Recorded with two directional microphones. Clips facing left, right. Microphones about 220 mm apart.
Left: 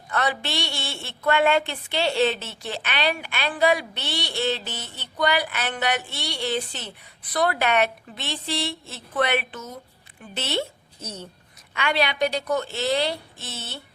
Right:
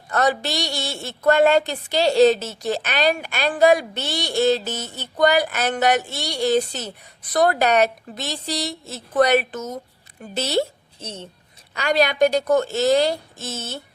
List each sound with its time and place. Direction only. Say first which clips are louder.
0.1 s a woman's voice: right 5 dB; 45° right (ahead or behind); by 11.3 s 25° right (ahead or behind)
11.7 s a woman's voice: right 5 dB; 40° right (ahead or behind)